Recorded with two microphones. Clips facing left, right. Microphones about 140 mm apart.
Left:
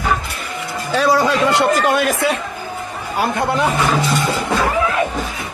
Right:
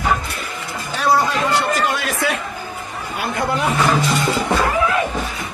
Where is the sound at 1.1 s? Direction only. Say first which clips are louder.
Even; 90° left.